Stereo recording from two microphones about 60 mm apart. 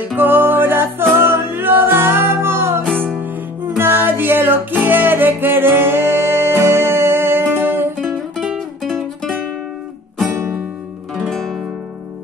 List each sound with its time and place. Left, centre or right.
0.2 s music: right
8.5 s music: centre
11.1 s music: centre